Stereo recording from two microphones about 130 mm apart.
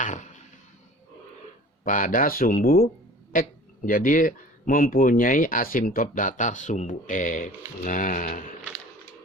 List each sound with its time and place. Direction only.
0.0 s a sound: 70° left (ahead or behind)
1.8 s speech: 90° left
3.8 s speech: 90° left